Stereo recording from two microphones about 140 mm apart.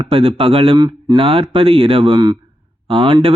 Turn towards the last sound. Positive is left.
turn(degrees=-35)  # may be behind; listen again after turning